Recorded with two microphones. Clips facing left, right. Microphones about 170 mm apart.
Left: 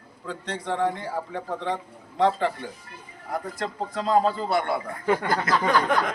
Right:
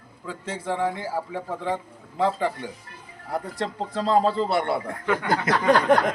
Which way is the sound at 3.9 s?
30° right (ahead or behind).